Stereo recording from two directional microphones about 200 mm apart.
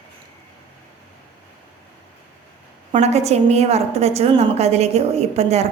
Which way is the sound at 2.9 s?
30° right (ahead or behind).